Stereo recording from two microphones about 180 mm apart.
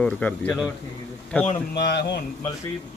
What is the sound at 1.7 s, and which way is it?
Speech, 65° left (ahead or behind).